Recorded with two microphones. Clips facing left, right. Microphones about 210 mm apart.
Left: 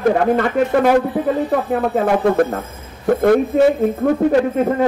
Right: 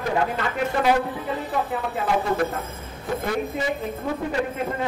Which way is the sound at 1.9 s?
60° left (ahead or behind).